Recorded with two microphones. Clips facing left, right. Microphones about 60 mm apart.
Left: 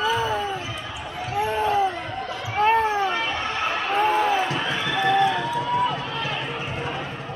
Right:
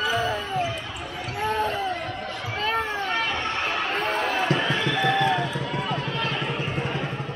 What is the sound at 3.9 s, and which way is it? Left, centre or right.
Basketball bounce, centre.